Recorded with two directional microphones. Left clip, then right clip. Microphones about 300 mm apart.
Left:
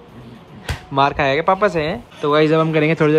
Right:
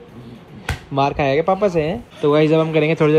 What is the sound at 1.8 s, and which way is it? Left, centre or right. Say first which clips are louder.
Speech: right 1 dB; left.